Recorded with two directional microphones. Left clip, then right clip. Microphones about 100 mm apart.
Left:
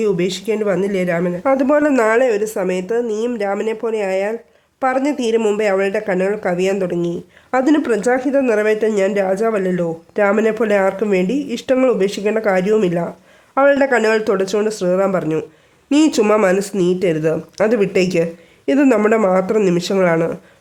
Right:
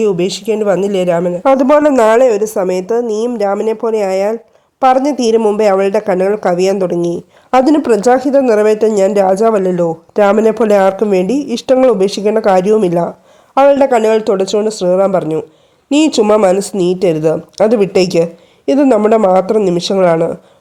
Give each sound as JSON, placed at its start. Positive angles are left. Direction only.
{"t": 0.0, "sound": "speech", "side_deg": -20}
{"t": 0.6, "sound": "speech", "side_deg": -35}